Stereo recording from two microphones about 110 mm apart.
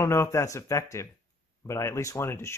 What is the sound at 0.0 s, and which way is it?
Speech, 25° left (ahead or behind).